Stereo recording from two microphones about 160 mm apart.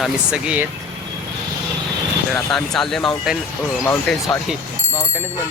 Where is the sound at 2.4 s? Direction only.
Centre (ahead or behind).